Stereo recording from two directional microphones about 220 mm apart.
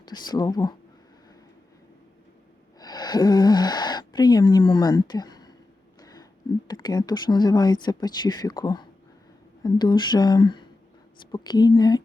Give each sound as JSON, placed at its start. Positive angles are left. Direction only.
{"t": 0.0, "sound": "speech", "side_deg": 20}
{"t": 2.7, "sound": "a sound", "side_deg": 20}
{"t": 6.7, "sound": "speech", "side_deg": 20}